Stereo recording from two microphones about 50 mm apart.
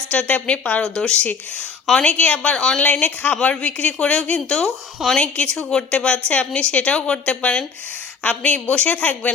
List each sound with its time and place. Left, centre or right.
0.1 s speech: left
0.8 s speech: centre
1.1 s speech: left
2.6 s speech: centre
2.8 s speech: left